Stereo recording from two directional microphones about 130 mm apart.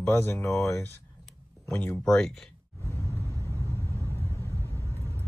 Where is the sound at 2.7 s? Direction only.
20° left (ahead or behind).